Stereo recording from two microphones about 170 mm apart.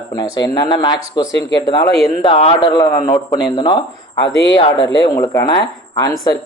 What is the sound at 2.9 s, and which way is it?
Speech, 55° left (ahead or behind).